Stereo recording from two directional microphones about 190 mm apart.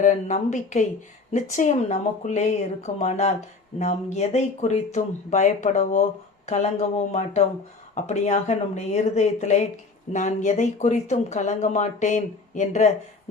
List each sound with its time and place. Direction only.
0.0 s speech: 40° left (ahead or behind)